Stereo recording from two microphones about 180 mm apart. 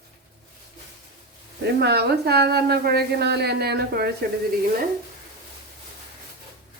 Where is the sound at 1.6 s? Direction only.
65° right (ahead or behind).